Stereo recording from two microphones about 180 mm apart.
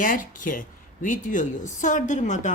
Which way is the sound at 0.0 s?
50° left (ahead or behind).